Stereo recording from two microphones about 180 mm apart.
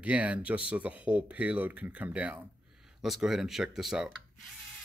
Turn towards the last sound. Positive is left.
turn(degrees=-5)  # may be behind; listen again after turning